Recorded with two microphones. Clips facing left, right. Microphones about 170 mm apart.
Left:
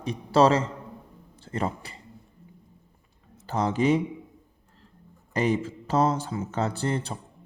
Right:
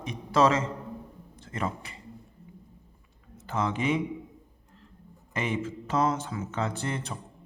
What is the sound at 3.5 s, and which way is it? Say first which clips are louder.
Speech: left 5 dB; 35° left (ahead or behind).